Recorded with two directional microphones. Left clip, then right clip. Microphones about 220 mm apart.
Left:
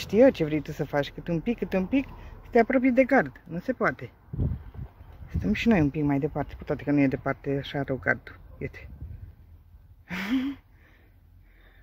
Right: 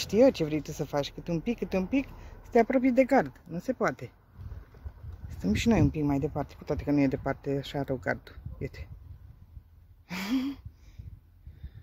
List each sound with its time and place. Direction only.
0.0 s speech: centre (ahead or behind)
5.3 s speech: 10° right (ahead or behind)
10.0 s speech: 5° right (ahead or behind)